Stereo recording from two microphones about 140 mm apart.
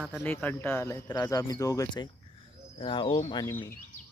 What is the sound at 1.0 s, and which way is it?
Speech, 30° left (ahead or behind).